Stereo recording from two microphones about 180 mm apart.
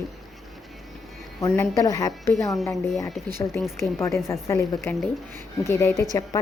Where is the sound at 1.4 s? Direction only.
15° left (ahead or behind).